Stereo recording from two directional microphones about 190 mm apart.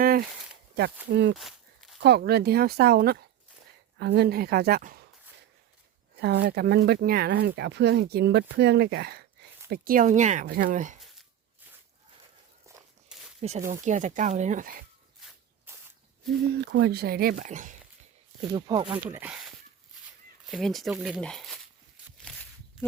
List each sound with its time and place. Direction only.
0.0 s a sound: 50° right (ahead or behind)
1.1 s speech: 70° right (ahead or behind)
1.4 s walk: centre (ahead or behind)
2.0 s speech: 60° right (ahead or behind)
6.1 s speech: 60° right (ahead or behind); by 10.9 s 45° right (ahead or behind)
13.4 s speech: 35° right (ahead or behind)
15.2 s a sound: 5° right (ahead or behind)
16.5 s speech: 60° right (ahead or behind); by 17.7 s 40° right (ahead or behind)
18.5 s speech: 25° right (ahead or behind)
19.0 s speech: 10° right (ahead or behind)
22.2 s walk: 5° left (ahead or behind)